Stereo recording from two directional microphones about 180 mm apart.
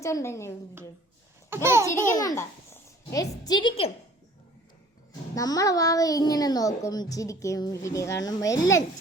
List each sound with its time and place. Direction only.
0.0 s a woman's voice: 15° left (ahead or behind)
1.5 s a child's voice: 15° right (ahead or behind)
2.0 s a child's voice: 15° left (ahead or behind)
5.3 s a child's voice: 20° left (ahead or behind)